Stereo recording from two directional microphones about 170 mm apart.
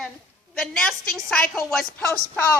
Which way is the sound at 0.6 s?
5° left (ahead or behind).